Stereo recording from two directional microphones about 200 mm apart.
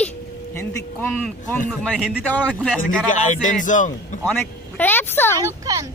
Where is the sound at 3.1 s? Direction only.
40° left (ahead or behind).